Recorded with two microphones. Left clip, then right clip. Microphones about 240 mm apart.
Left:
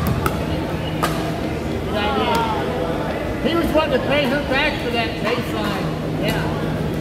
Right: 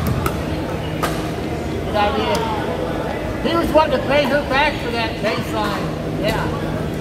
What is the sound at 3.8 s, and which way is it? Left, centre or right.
Speech, right.